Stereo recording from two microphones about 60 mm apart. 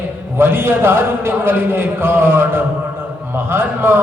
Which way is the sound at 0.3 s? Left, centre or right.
Right.